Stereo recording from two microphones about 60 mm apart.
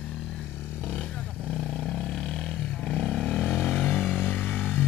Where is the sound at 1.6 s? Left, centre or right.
Centre.